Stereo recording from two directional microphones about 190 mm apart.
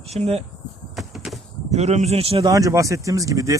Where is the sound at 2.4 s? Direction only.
15° right (ahead or behind).